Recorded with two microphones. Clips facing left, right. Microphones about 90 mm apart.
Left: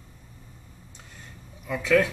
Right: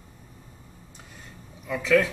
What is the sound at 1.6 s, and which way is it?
Speech, centre (ahead or behind).